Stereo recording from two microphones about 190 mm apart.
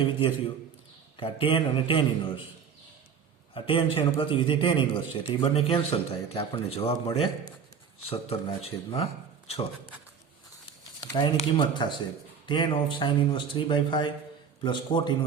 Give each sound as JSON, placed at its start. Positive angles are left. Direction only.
{"t": 0.0, "sound": "speech", "side_deg": 25}
{"t": 3.5, "sound": "speech", "side_deg": 25}
{"t": 11.0, "sound": "a sound", "side_deg": 20}
{"t": 11.3, "sound": "speech", "side_deg": 25}